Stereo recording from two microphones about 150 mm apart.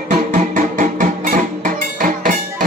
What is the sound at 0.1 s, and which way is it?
Music, 60° right (ahead or behind).